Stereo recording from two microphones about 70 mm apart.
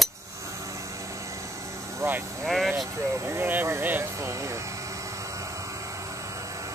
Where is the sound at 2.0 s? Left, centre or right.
Right.